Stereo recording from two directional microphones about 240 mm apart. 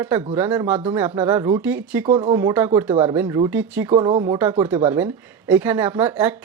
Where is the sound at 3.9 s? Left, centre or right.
Right.